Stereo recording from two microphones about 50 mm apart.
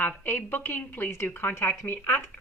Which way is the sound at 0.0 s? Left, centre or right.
Left.